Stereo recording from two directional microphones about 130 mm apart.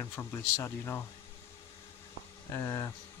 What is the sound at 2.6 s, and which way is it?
Speech, 25° left (ahead or behind).